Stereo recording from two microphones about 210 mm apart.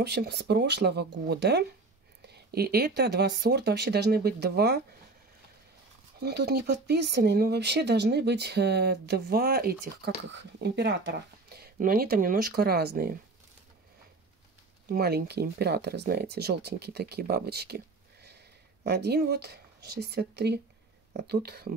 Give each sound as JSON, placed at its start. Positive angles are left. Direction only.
{"t": 0.0, "sound": "speech", "side_deg": -50}
{"t": 6.2, "sound": "speech", "side_deg": -50}
{"t": 14.9, "sound": "speech", "side_deg": -50}